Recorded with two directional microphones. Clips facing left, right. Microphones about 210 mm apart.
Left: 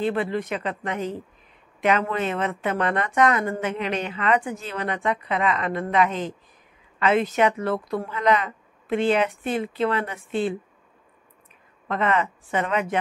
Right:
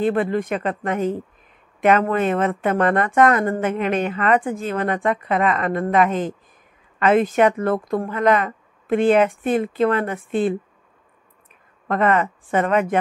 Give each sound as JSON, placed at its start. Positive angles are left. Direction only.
{"t": 0.0, "sound": "a woman's voice", "side_deg": -50}
{"t": 11.9, "sound": "a woman's voice", "side_deg": -50}